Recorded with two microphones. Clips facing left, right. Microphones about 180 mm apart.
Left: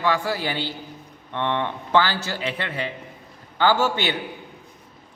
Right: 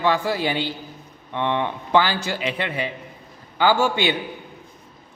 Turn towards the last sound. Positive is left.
turn(degrees=-15)  # may be behind; listen again after turning